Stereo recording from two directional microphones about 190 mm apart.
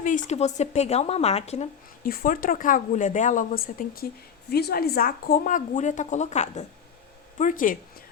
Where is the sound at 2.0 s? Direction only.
50° left (ahead or behind).